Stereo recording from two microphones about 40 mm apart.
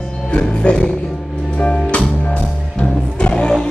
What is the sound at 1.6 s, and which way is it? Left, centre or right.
Music, left.